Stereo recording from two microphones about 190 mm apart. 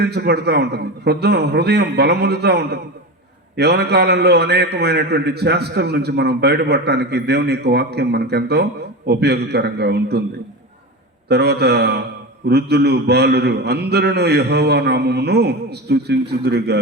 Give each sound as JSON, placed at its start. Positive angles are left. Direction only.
{"t": 0.0, "sound": "a man's voice", "side_deg": -60}
{"t": 11.3, "sound": "a man's voice", "side_deg": -60}